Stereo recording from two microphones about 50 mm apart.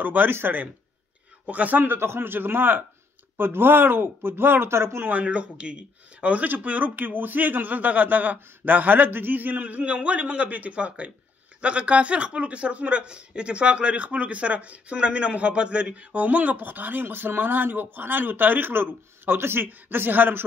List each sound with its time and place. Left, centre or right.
0.0 s speech: right
1.4 s speech: right
2.0 s speech: right
5.0 s a man's voice: right